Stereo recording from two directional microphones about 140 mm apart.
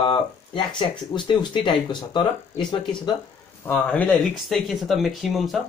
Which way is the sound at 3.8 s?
5° left (ahead or behind).